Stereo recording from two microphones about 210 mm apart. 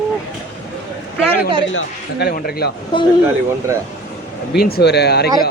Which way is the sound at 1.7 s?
65° left (ahead or behind).